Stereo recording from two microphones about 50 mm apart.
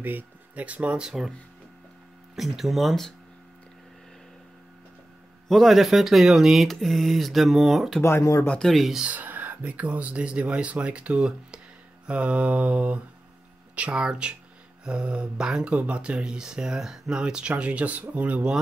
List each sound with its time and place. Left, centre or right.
0.0 s speech: right
1.0 s speech: centre
2.3 s speech: centre
5.5 s speech: centre
8.0 s speech: left
8.5 s speech: centre
9.0 s speech: right; by 17.2 s centre
17.2 s speech: centre